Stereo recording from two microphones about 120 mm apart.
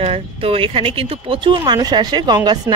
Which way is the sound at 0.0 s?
55° right (ahead or behind).